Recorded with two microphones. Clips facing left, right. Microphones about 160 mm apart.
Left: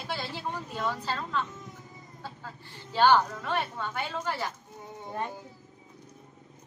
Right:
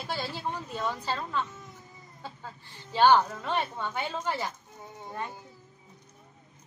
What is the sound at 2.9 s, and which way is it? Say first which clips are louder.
A woman's voice: right 1 dB; 15° right (ahead or behind).